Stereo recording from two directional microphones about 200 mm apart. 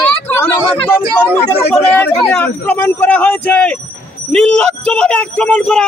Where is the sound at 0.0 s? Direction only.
10° left (ahead or behind).